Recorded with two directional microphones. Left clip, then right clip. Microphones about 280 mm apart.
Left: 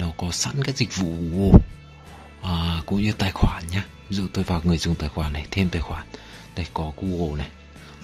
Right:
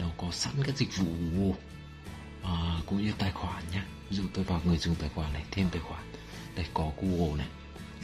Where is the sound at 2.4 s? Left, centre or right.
Left.